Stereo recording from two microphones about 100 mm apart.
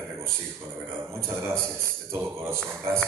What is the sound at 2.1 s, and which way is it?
Speech, 25° right (ahead or behind).